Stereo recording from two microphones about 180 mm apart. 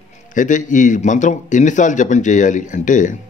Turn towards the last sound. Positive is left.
turn(degrees=45)  # may be behind; listen again after turning